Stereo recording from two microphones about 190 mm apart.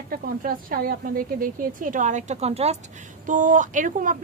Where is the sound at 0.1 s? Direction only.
50° right (ahead or behind).